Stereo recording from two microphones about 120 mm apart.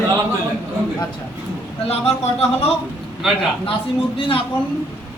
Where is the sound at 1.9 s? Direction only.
60° left (ahead or behind).